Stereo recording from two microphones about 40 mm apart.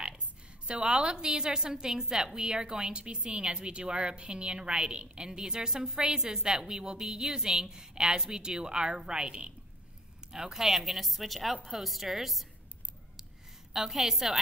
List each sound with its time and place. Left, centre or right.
0.7 s a woman's voice: right; by 12.4 s centre
13.7 s a woman's voice: centre